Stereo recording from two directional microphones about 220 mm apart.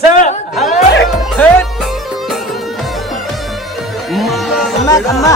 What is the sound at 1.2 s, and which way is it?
Music, 5° left (ahead or behind).